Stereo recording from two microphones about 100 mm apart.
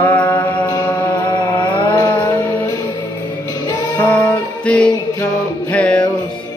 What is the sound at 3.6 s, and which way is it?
Music, 40° left (ahead or behind).